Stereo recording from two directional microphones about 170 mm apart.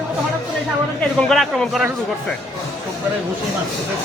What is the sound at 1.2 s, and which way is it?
Speech, centre (ahead or behind).